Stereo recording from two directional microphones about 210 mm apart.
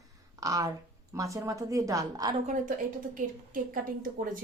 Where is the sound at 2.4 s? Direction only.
40° right (ahead or behind).